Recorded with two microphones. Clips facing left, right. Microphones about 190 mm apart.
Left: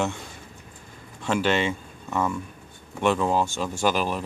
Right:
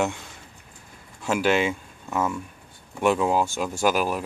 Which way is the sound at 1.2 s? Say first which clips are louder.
Right 1 dB; 10° right (ahead or behind).